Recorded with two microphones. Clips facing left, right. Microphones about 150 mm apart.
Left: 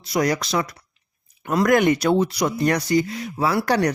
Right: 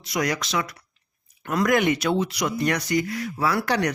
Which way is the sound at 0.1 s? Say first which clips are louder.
Left 4 dB; 35° left (ahead or behind).